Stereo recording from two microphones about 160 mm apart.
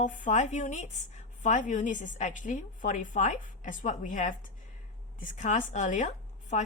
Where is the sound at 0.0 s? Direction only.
55° left (ahead or behind).